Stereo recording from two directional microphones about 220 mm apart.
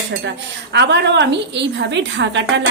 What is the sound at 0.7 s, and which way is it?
A woman's voice, 50° right (ahead or behind).